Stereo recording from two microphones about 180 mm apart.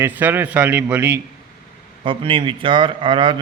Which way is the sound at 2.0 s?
30° right (ahead or behind).